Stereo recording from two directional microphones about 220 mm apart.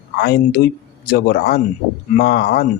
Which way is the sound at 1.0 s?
45° left (ahead or behind).